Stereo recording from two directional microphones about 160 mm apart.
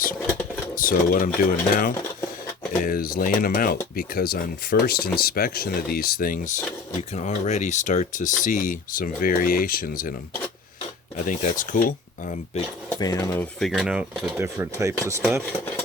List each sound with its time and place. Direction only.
0.8 s speech: 60° left (ahead or behind)
7.1 s speech: 45° left (ahead or behind)
11.2 s speech: 55° left (ahead or behind)
13.0 s speech: 25° left (ahead or behind)
13.3 s speech: 10° left (ahead or behind)
13.7 s speech: 5° right (ahead or behind)